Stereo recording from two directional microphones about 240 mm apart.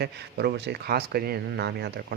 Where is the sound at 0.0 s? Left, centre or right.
Right.